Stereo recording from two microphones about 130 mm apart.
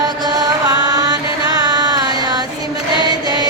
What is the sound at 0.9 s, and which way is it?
Chant, 30° right (ahead or behind).